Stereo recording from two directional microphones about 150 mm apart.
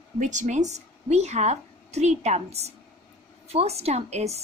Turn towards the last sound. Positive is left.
turn(degrees=-45)  # may be behind; listen again after turning